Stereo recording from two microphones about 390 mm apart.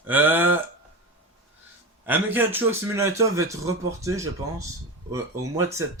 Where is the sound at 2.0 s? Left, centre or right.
Centre.